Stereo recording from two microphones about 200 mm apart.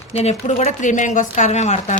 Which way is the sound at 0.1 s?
30° left (ahead or behind).